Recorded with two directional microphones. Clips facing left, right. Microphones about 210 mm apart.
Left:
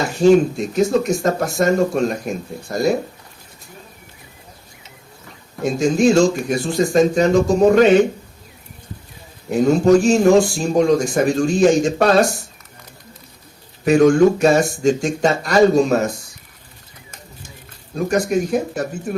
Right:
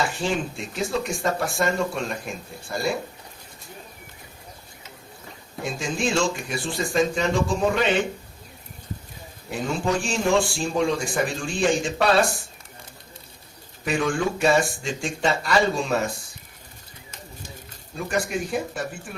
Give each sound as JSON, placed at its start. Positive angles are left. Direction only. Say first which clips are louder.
{"t": 0.0, "sound": "speech", "louder": "left 13 dB", "side_deg": 40}
{"t": 5.6, "sound": "speech", "louder": "left 12 dB", "side_deg": 40}
{"t": 9.5, "sound": "speech", "louder": "left 12 dB", "side_deg": 40}
{"t": 13.8, "sound": "speech", "louder": "left 12 dB", "side_deg": 40}
{"t": 18.1, "sound": "speech", "louder": "left 8 dB", "side_deg": 40}